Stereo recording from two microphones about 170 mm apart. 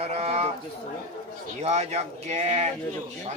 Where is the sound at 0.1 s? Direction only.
35° right (ahead or behind).